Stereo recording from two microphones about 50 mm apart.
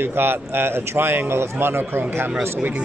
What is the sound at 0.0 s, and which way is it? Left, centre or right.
A man's voice, right.